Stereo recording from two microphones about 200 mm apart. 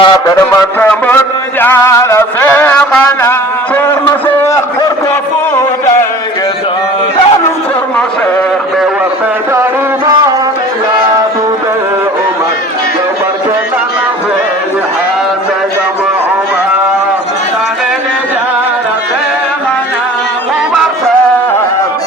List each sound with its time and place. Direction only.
0.0 s music: 10° left (ahead or behind)